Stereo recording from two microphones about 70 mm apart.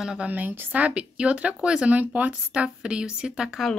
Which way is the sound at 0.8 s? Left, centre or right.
Centre.